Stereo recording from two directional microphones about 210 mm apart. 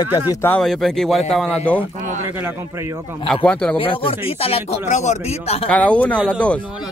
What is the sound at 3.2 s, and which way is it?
Speech, 5° left (ahead or behind).